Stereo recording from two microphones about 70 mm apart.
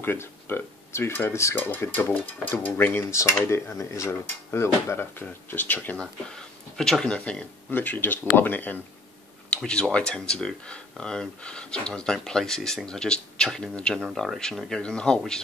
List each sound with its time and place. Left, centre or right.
0.0 s speech: left
3.0 s speech: left
5.9 s speech: centre
7.7 s speech: left
9.5 s speech: centre